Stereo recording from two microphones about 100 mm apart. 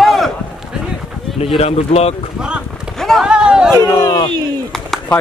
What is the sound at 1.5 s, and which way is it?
Speech, 90° left.